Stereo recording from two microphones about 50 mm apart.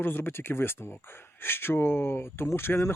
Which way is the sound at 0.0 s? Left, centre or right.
Left.